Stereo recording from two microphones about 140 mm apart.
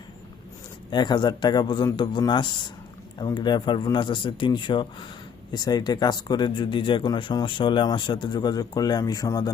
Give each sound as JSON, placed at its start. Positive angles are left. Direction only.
{"t": 0.9, "sound": "speech", "side_deg": 30}